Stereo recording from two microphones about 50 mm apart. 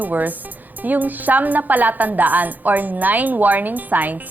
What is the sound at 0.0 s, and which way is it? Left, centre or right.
A woman's voice, right.